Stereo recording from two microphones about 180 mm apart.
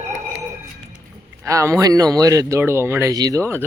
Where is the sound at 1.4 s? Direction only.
15° right (ahead or behind).